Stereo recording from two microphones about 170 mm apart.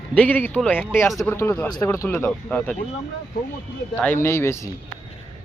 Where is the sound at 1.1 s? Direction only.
Centre (ahead or behind).